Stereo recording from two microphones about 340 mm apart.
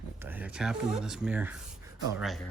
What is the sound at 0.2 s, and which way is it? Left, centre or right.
Speech, centre.